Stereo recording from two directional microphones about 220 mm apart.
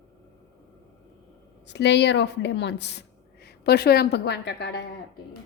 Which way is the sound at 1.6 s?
50° left (ahead or behind).